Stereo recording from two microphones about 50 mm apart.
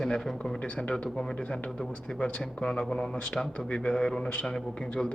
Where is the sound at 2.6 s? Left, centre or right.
Left.